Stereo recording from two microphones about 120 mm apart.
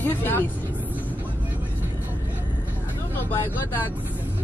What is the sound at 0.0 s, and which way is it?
Speech, 15° left (ahead or behind).